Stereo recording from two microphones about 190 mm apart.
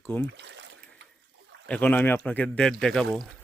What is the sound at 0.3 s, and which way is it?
Boat, 65° right (ahead or behind).